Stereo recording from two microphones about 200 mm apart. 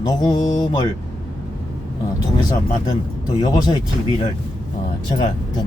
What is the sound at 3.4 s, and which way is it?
Speech, 20° left (ahead or behind).